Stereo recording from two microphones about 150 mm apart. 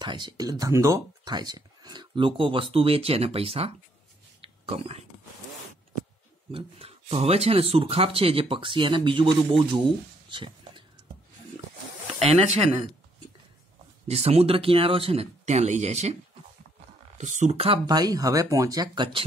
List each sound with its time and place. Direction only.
0.0 s speech: 30° right (ahead or behind)
4.4 s a sound: 40° right (ahead or behind)
6.5 s speech: 40° right (ahead or behind)
10.3 s a sound: 35° right (ahead or behind)
12.2 s speech: 40° right (ahead or behind)
14.0 s speech: 45° right (ahead or behind)
17.2 s speech: 55° right (ahead or behind)
17.8 s speech: 25° right (ahead or behind)